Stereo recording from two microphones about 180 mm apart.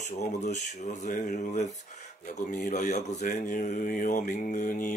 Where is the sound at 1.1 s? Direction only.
45° left (ahead or behind).